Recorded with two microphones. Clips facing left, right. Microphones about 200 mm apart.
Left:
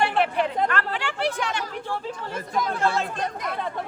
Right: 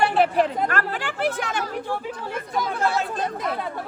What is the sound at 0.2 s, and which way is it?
Speech, 40° right (ahead or behind).